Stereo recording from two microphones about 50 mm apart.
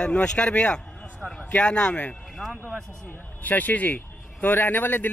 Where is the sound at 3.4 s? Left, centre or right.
Left.